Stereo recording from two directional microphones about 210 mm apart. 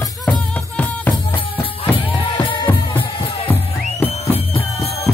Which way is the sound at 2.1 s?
25° left (ahead or behind).